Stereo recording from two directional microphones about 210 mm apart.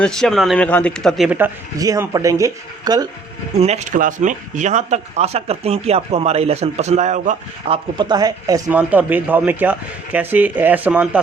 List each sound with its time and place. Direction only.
0.0 s speech: 5° left (ahead or behind)
1.8 s speech: 15° right (ahead or behind)
3.6 s speech: 30° right (ahead or behind)
7.9 s speech: 20° right (ahead or behind)